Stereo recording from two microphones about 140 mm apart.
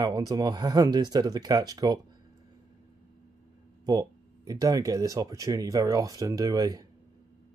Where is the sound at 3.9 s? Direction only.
25° right (ahead or behind).